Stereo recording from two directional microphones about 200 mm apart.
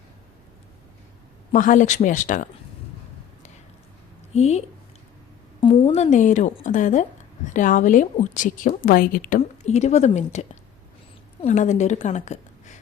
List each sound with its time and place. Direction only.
1.5 s a woman's voice: 40° left (ahead or behind)
4.4 s a woman's voice: 35° left (ahead or behind)